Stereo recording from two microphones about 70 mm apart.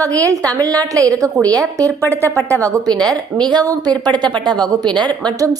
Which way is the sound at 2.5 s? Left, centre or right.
Right.